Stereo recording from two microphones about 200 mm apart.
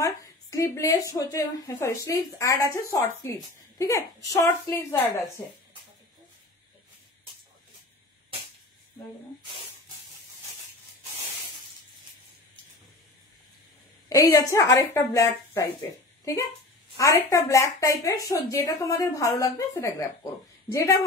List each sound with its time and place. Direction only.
0.0 s a woman's voice: 15° left (ahead or behind)
14.0 s a woman's voice: 15° left (ahead or behind)